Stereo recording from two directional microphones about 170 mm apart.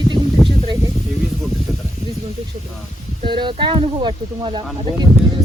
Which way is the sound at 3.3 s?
30° right (ahead or behind).